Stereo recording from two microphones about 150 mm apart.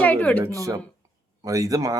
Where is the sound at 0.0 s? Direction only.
10° left (ahead or behind).